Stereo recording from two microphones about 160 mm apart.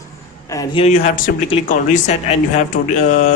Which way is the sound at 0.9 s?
50° left (ahead or behind).